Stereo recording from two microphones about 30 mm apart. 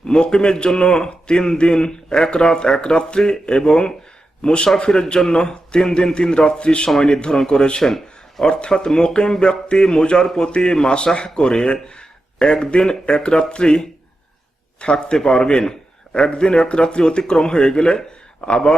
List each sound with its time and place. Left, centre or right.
0.0 s a man's voice: left